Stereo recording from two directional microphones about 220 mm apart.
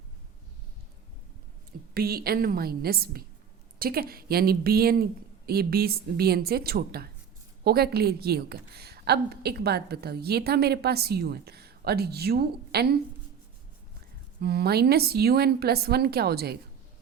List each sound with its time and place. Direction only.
1.9 s a woman's voice: 45° right (ahead or behind)
14.4 s a woman's voice: 45° right (ahead or behind)